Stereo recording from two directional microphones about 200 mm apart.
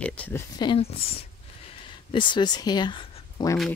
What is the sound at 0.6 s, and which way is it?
Speech, 25° left (ahead or behind).